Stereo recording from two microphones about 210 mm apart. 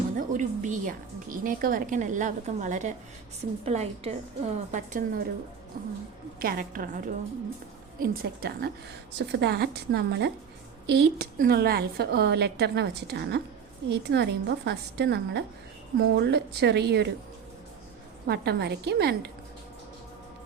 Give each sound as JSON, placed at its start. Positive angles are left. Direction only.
{"t": 0.2, "sound": "a woman's voice", "side_deg": -35}
{"t": 6.4, "sound": "a woman's voice", "side_deg": -45}
{"t": 18.3, "sound": "a woman's voice", "side_deg": -50}